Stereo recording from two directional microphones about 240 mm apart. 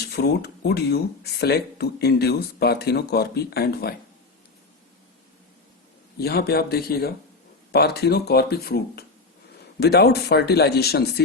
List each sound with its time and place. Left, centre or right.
0.1 s speech: left
6.1 s speech: left